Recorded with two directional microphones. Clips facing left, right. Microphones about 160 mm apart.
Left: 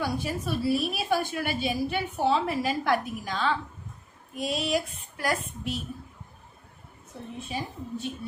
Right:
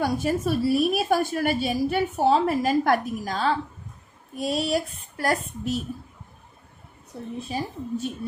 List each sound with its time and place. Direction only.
0.0 s a woman's voice: 45° right (ahead or behind)
4.4 s child singing: 40° right (ahead or behind)
7.4 s a woman's voice: 40° right (ahead or behind)